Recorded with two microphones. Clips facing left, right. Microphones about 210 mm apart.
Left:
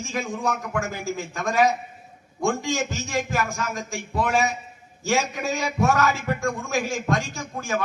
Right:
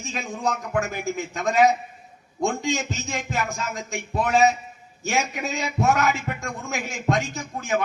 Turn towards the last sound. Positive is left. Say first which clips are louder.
# right 2 dB
turn(degrees=-20)  # may be behind; listen again after turning